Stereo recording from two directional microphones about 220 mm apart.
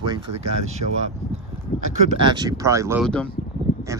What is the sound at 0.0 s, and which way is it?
Speech, 20° right (ahead or behind).